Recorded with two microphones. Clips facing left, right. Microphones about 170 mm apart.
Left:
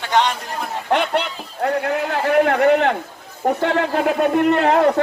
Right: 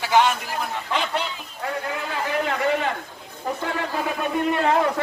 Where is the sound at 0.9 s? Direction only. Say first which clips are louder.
Left 9 dB; 60° left (ahead or behind).